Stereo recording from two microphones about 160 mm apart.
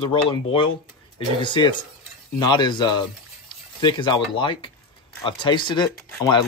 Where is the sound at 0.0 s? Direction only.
35° left (ahead or behind).